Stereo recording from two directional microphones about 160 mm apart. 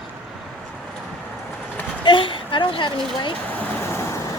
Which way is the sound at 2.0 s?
30° left (ahead or behind).